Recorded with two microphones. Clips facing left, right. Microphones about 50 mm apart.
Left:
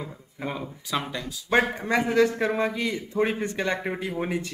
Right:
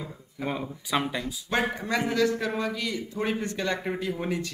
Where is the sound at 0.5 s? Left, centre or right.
Centre.